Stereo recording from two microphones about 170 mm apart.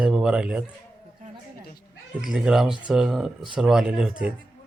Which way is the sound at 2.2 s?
5° right (ahead or behind).